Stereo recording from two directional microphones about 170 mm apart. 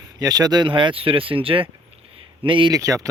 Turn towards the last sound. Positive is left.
turn(degrees=-20)  # may be behind; listen again after turning